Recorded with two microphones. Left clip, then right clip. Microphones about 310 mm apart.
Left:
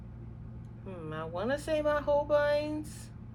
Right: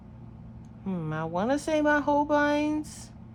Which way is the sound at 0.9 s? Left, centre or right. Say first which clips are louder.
Right 6 dB; right.